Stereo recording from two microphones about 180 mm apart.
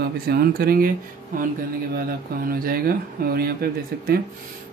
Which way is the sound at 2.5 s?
55° right (ahead or behind).